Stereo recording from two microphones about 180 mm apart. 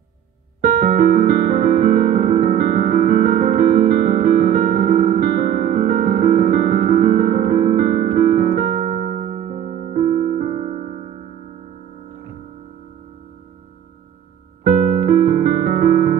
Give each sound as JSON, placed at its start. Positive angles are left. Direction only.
{"t": 0.6, "sound": "keyboard", "side_deg": -45}
{"t": 1.8, "sound": "music", "side_deg": -50}
{"t": 5.8, "sound": "piano", "side_deg": -45}
{"t": 14.7, "sound": "music", "side_deg": -40}